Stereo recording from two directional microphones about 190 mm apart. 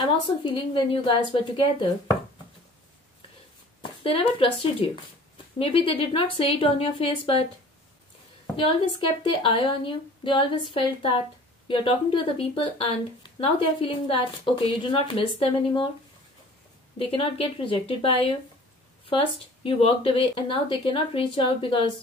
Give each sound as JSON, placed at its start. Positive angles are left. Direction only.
{"t": 0.0, "sound": "speech", "side_deg": 25}
{"t": 3.8, "sound": "speech", "side_deg": 30}
{"t": 8.5, "sound": "speech", "side_deg": 25}
{"t": 17.0, "sound": "speech", "side_deg": 30}